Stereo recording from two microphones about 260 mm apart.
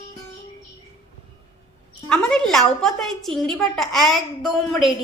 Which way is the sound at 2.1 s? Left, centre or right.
Centre.